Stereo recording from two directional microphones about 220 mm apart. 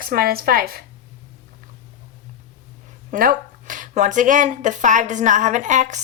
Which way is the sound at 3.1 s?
40° right (ahead or behind).